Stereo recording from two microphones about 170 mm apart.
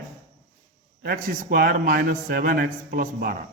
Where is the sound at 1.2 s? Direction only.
55° right (ahead or behind).